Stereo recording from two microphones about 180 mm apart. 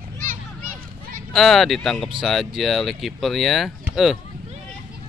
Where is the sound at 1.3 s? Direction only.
Centre (ahead or behind).